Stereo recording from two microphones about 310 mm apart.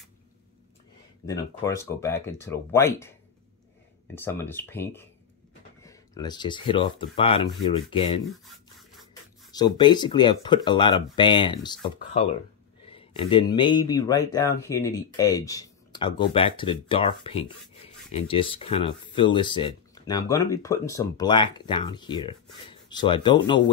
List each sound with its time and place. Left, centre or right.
1.2 s speech: centre
8.3 s rub: centre
9.5 s speech: centre